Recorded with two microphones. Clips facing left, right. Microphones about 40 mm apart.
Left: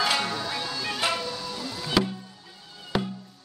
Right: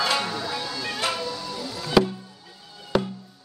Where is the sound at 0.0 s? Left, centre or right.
Centre.